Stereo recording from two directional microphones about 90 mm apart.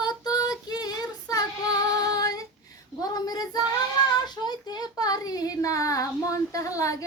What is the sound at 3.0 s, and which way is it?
A child's voice, 45° left (ahead or behind).